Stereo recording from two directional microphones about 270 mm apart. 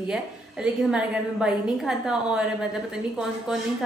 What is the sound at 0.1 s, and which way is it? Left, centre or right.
A woman's voice, centre.